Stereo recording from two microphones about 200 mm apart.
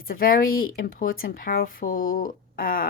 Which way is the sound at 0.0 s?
45° left (ahead or behind).